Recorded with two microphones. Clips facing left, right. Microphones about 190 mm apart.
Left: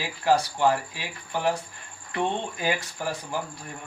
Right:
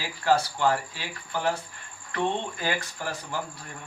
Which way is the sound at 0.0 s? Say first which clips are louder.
Left 1 dB; 15° left (ahead or behind).